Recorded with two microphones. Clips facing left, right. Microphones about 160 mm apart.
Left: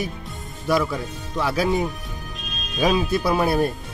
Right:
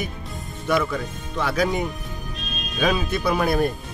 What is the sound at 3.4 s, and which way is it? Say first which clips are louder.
Speech: even; 30° left (ahead or behind).